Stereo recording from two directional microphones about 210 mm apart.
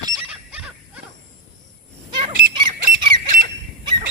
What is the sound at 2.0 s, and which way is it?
Squeak, 25° right (ahead or behind).